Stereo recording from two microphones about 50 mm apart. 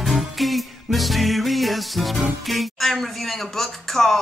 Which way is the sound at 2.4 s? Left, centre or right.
Centre.